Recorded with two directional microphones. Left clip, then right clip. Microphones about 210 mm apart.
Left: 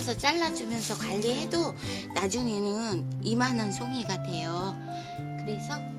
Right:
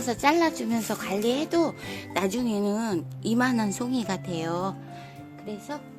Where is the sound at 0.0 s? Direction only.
45° right (ahead or behind).